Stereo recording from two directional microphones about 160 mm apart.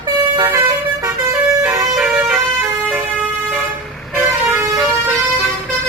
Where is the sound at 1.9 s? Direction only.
5° right (ahead or behind).